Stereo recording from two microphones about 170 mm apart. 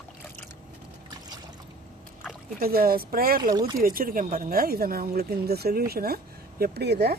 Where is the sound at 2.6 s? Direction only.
60° right (ahead or behind).